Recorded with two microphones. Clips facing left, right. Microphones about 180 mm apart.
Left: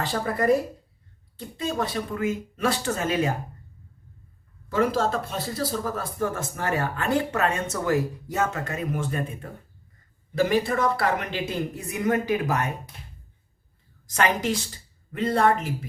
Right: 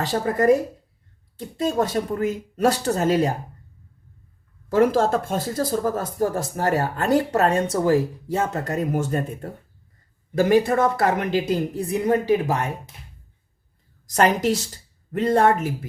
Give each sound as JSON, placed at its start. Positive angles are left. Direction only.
{"t": 0.0, "sound": "speech", "side_deg": -45}
{"t": 4.7, "sound": "speech", "side_deg": -50}
{"t": 14.1, "sound": "speech", "side_deg": -40}